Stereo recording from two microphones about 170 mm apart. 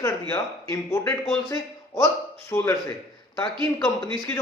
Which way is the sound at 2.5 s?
10° left (ahead or behind).